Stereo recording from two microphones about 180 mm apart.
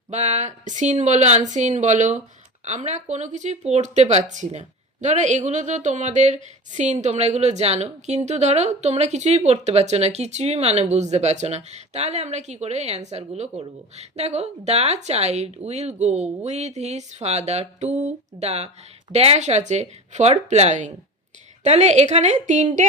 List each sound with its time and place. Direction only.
0.1 s a woman's voice: 40° right (ahead or behind)